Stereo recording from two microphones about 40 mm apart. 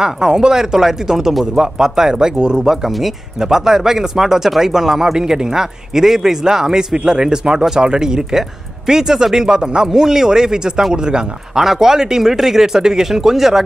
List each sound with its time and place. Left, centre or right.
0.0 s speech: centre
11.5 s speech: centre